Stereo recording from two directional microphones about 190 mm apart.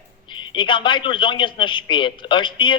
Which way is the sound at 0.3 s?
25° left (ahead or behind).